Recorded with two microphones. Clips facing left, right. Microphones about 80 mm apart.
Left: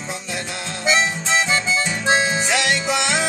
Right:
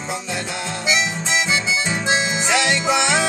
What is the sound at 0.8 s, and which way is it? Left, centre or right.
Harmonica, left.